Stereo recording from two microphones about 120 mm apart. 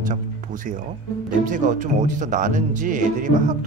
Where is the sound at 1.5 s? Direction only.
90° right.